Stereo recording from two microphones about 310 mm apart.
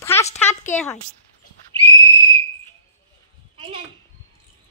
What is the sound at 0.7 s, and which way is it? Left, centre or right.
Speech, centre.